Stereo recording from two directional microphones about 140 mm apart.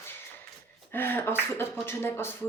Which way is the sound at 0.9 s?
15° left (ahead or behind).